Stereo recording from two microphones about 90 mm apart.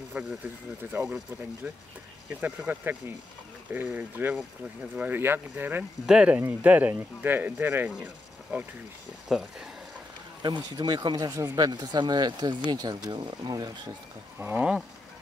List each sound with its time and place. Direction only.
0.2 s speech: 15° right (ahead or behind)
2.4 s speech: 15° right (ahead or behind)
6.0 s speech: 15° right (ahead or behind)
10.4 s speech: 55° right (ahead or behind)
14.4 s speech: 15° right (ahead or behind)